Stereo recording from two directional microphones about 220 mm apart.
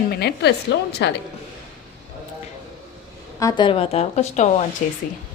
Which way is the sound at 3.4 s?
20° left (ahead or behind).